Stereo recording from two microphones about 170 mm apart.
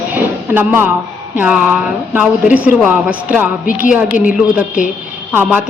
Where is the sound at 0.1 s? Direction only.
10° right (ahead or behind).